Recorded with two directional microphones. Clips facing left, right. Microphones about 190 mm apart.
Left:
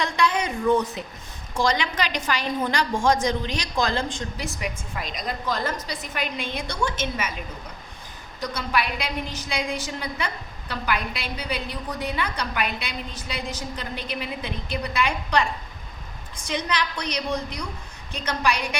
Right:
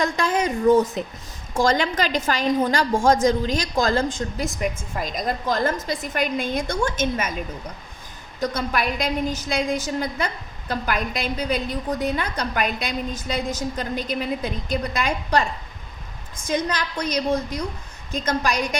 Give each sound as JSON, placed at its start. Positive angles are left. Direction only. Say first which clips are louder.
{"t": 0.0, "sound": "a woman's voice", "louder": "right 2 dB", "side_deg": -45}
{"t": 8.4, "sound": "a woman's voice", "louder": "right 3 dB", "side_deg": -45}